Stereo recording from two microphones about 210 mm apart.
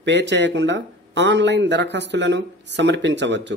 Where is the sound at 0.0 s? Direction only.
55° right (ahead or behind).